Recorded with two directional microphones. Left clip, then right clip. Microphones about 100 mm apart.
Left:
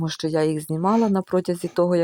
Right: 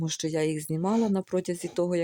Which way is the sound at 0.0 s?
20° left (ahead or behind).